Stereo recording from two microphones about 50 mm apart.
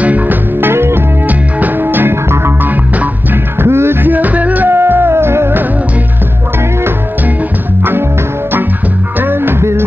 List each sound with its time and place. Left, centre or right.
0.0 s music: right
1.2 s music: right
3.5 s music: right
9.2 s music: right
9.6 s music: right